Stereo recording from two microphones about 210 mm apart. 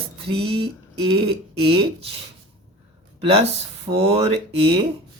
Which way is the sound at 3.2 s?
30° right (ahead or behind).